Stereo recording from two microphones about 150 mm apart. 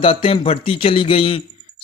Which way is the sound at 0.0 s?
35° left (ahead or behind).